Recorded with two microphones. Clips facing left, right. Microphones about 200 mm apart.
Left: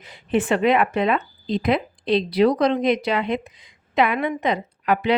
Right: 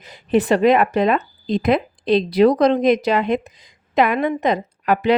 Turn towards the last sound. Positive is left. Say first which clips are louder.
# right 3 dB
turn(degrees=-45)  # may be behind; listen again after turning